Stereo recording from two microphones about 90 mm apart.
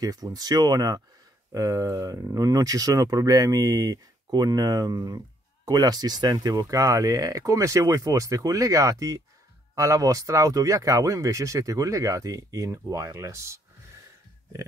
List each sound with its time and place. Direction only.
0.0 s speech: 45° right (ahead or behind)